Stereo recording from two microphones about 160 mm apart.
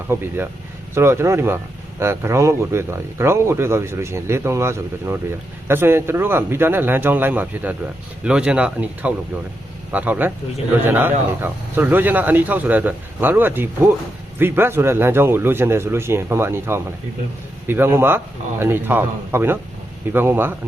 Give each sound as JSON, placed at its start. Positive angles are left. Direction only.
{"t": 0.1, "sound": "speech", "side_deg": -15}